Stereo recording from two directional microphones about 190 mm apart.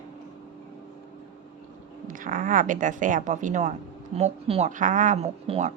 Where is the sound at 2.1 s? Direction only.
45° right (ahead or behind).